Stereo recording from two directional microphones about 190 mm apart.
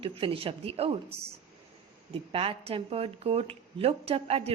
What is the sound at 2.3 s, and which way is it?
A woman's voice, 30° right (ahead or behind).